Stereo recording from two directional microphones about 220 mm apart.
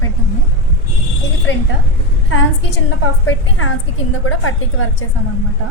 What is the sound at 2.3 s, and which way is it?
A woman's voice, 60° left (ahead or behind).